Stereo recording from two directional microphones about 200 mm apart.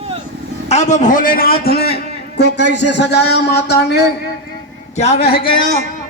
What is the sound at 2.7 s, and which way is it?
Speech, 60° left (ahead or behind).